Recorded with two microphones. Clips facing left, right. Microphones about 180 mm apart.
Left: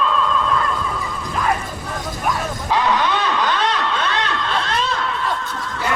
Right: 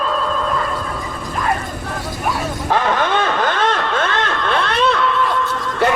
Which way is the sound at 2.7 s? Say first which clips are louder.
Right 1 dB; 50° right (ahead or behind).